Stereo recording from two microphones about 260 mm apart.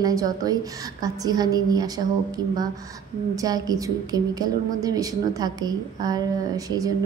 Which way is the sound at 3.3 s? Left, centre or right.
Centre.